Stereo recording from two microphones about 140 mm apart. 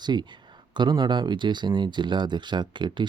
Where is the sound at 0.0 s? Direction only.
30° right (ahead or behind).